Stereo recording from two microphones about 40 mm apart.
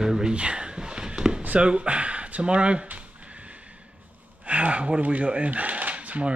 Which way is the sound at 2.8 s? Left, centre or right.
Right.